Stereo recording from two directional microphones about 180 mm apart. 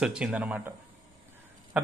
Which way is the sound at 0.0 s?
5° right (ahead or behind).